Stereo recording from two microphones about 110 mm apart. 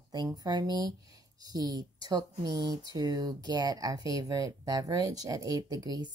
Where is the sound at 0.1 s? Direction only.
40° right (ahead or behind).